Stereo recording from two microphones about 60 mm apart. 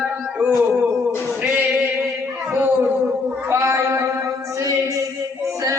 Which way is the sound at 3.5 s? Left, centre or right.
Right.